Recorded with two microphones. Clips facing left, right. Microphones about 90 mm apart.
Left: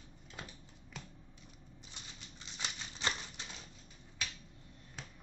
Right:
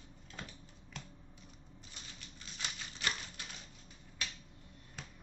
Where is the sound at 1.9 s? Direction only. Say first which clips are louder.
Even; 20° left (ahead or behind).